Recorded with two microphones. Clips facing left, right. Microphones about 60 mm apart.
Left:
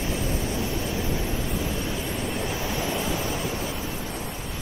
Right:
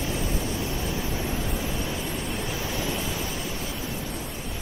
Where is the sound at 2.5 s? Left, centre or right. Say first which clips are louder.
Left 2 dB; left.